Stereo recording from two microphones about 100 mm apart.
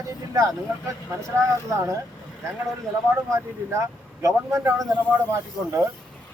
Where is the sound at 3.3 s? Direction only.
30° right (ahead or behind).